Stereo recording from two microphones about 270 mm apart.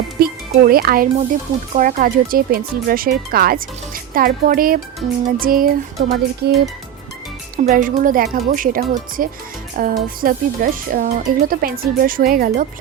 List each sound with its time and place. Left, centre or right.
0.2 s speech: right